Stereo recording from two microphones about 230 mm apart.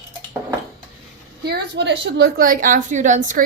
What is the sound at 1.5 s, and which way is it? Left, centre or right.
Speech, right.